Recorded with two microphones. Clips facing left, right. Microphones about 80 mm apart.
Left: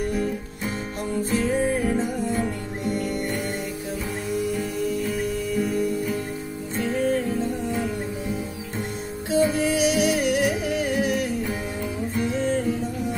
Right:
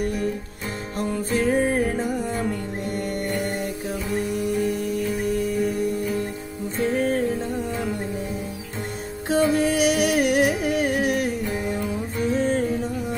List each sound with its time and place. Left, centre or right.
1.3 s music: right
9.3 s music: right